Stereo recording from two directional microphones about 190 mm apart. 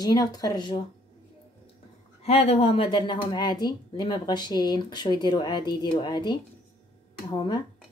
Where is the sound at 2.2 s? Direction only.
30° left (ahead or behind).